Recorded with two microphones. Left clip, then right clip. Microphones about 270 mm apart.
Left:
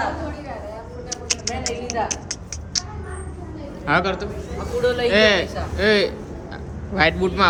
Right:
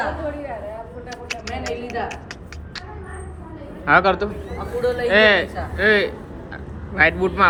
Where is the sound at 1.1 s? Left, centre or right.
Centre.